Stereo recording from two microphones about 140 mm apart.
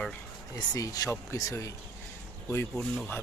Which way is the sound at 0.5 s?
25° left (ahead or behind).